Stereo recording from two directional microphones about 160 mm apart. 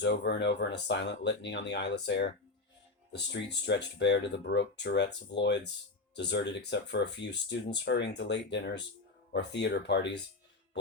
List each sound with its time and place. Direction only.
0.0 s speech: 90° left